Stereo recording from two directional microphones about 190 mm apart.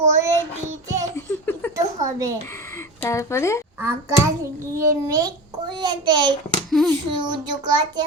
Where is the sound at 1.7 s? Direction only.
15° right (ahead or behind).